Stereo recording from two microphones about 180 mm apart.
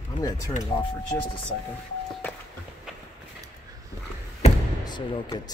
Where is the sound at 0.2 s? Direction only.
20° left (ahead or behind).